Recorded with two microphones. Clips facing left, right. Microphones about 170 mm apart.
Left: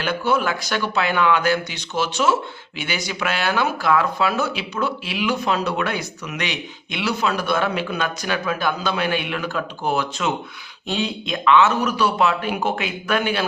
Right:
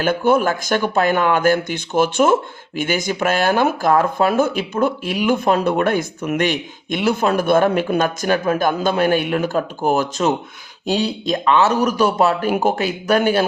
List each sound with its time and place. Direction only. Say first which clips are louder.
0.0 s speech: right 5 dB; 50° right (ahead or behind)